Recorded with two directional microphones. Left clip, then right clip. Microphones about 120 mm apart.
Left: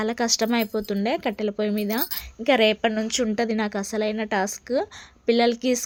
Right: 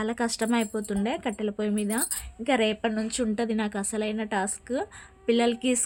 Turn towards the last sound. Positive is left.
turn(degrees=25)  # may be behind; listen again after turning